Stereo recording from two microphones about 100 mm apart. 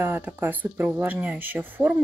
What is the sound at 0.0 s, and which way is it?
Speech, 20° right (ahead or behind).